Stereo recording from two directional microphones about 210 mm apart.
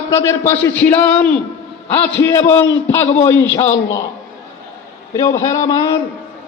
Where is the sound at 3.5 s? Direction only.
30° left (ahead or behind).